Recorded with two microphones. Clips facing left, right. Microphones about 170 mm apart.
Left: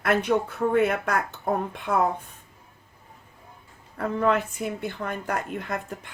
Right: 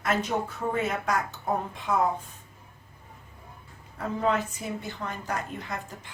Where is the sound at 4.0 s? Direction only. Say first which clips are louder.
Left 3 dB; 60° left (ahead or behind).